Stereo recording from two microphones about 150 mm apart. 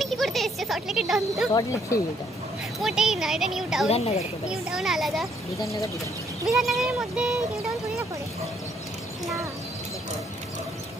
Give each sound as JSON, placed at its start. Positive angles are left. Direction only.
{"t": 0.0, "sound": "a sound", "side_deg": 0}
{"t": 1.5, "sound": "speech", "side_deg": 25}
{"t": 2.8, "sound": "speech", "side_deg": -5}
{"t": 3.9, "sound": "speech", "side_deg": 45}
{"t": 4.5, "sound": "speech", "side_deg": -5}
{"t": 5.6, "sound": "speech", "side_deg": 20}
{"t": 6.4, "sound": "speech", "side_deg": 0}